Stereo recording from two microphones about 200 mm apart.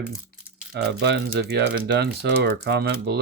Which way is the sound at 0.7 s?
55° right (ahead or behind).